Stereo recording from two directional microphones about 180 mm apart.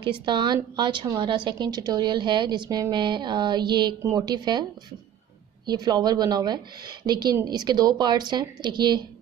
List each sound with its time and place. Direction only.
0.0 s a woman's voice: 25° right (ahead or behind)
5.7 s a woman's voice: 20° right (ahead or behind)